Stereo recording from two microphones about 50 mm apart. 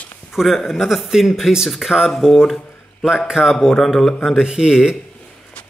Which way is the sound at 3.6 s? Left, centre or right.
Centre.